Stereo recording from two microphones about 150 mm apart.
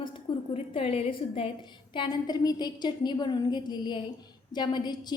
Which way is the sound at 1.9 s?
30° left (ahead or behind).